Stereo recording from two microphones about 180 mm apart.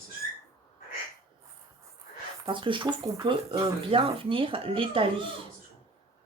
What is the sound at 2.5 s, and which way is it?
Speech, 25° right (ahead or behind).